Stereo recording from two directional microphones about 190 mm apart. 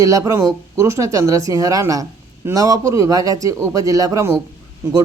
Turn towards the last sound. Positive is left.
turn(degrees=-15)  # may be behind; listen again after turning